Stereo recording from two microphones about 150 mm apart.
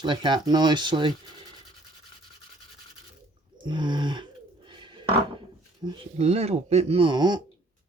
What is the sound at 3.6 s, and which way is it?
Speech, 30° right (ahead or behind).